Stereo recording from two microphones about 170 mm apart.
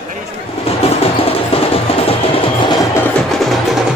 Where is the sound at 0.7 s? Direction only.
35° left (ahead or behind).